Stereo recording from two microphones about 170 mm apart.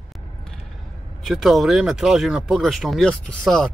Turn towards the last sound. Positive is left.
turn(degrees=5)  # may be behind; listen again after turning